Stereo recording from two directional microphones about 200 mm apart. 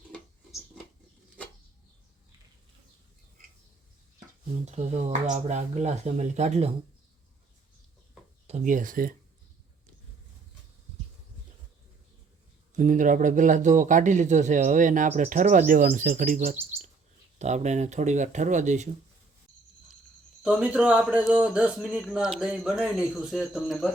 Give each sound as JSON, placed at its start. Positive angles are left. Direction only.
{"t": 4.6, "sound": "speech", "side_deg": -35}
{"t": 8.4, "sound": "speech", "side_deg": -35}
{"t": 12.7, "sound": "speech", "side_deg": -40}
{"t": 20.4, "sound": "speech", "side_deg": -5}